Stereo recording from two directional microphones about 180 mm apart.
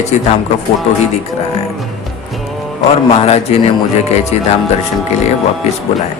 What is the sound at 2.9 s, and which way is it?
Speech, 35° left (ahead or behind).